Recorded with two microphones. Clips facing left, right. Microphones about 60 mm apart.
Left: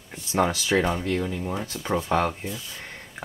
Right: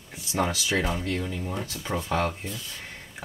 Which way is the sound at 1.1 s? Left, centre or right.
Centre.